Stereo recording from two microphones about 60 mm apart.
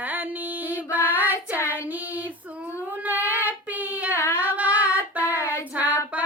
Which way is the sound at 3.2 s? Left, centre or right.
Left.